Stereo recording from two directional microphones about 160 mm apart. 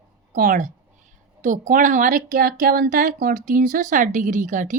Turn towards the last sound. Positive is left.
turn(degrees=-50)  # may be behind; listen again after turning